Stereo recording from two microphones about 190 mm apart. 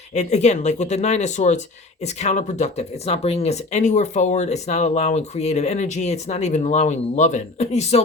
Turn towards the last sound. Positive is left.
turn(degrees=35)  # may be behind; listen again after turning